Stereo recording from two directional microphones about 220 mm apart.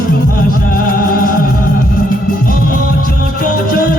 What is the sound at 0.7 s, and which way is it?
Music, 40° left (ahead or behind).